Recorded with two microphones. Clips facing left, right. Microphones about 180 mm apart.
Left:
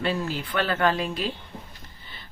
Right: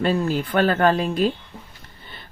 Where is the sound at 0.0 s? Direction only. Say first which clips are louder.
Right 6 dB; 45° right (ahead or behind).